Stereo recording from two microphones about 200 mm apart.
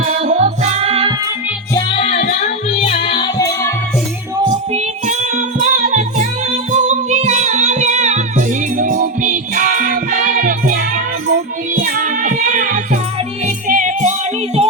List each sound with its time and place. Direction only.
0.0 s music: 35° right (ahead or behind)
2.0 s music: 35° left (ahead or behind); by 3.7 s 20° left (ahead or behind)
4.7 s music: 35° right (ahead or behind)